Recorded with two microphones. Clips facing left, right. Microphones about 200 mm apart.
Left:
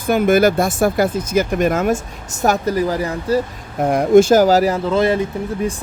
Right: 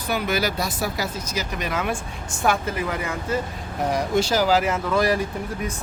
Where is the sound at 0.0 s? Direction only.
50° left (ahead or behind).